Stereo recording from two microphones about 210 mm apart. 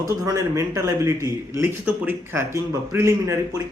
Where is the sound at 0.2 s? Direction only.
15° right (ahead or behind).